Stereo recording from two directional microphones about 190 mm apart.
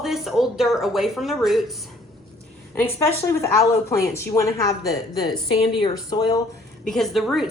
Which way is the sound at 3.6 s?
15° left (ahead or behind).